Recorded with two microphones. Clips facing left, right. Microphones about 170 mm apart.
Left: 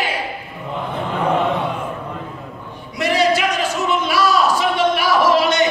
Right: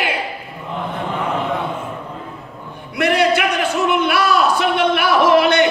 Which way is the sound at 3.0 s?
60° right (ahead or behind).